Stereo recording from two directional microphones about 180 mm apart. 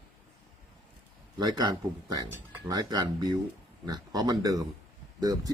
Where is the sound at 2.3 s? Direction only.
20° right (ahead or behind).